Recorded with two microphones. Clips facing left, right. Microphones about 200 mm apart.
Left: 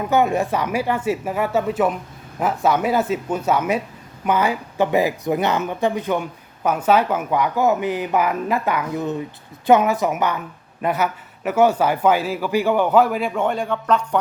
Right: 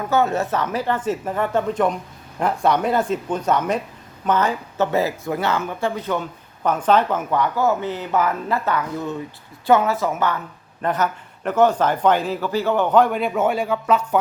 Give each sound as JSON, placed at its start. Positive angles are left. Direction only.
{"t": 0.0, "sound": "speech", "side_deg": 15}